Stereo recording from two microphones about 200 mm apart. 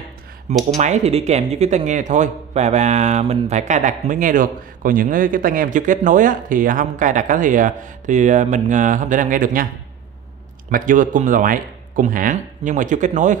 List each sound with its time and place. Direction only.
0.7 s a man's voice: 35° right (ahead or behind)
10.7 s a man's voice: 40° right (ahead or behind)